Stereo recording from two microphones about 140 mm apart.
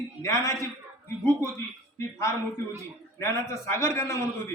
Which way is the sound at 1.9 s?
20° left (ahead or behind).